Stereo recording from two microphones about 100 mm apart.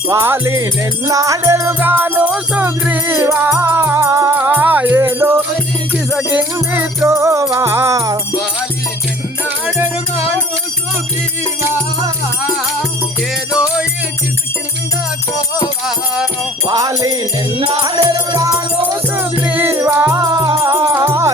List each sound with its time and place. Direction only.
0.1 s music: 25° right (ahead or behind)
4.4 s music: 20° right (ahead or behind)
7.1 s music: 30° right (ahead or behind)
9.7 s music: 25° right (ahead or behind)
13.5 s music: 10° right (ahead or behind)
16.6 s music: 40° right (ahead or behind)
19.5 s music: 20° right (ahead or behind)
20.1 s music: 40° right (ahead or behind)